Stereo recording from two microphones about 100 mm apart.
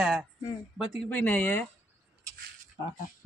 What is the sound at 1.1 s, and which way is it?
Speech, 15° left (ahead or behind).